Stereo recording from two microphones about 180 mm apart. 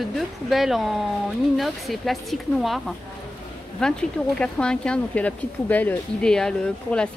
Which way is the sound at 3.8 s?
5° left (ahead or behind).